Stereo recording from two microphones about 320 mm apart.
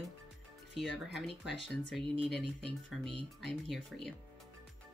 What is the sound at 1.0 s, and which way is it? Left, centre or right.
Speech, centre.